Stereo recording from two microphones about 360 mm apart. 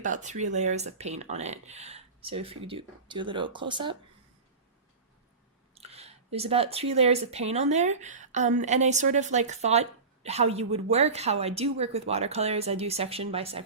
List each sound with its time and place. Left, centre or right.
0.0 s speech: centre
5.7 s speech: centre